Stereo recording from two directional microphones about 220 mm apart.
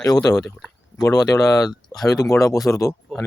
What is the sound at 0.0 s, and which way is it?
Speech, 15° left (ahead or behind).